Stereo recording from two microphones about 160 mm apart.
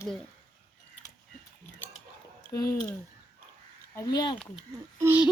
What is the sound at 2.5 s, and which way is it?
Speech, 20° left (ahead or behind).